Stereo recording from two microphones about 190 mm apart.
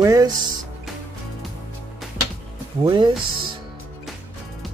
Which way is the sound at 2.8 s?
25° right (ahead or behind).